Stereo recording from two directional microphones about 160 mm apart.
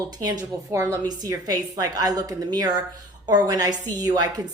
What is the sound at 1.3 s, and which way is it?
Speech, 20° right (ahead or behind).